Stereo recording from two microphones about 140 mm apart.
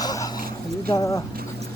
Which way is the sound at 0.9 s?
20° left (ahead or behind).